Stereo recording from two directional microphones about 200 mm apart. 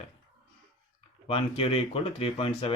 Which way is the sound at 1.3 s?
30° left (ahead or behind).